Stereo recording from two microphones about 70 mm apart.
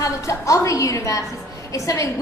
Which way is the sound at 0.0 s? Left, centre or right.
Left.